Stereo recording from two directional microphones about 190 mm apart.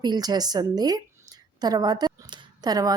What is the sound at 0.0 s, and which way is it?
A woman's voice, 20° right (ahead or behind).